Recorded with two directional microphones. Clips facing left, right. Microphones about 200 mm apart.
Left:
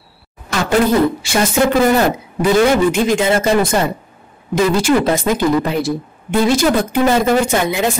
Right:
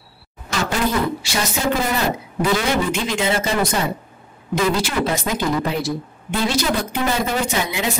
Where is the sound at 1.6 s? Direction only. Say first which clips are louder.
Left 7 dB; 55° left (ahead or behind).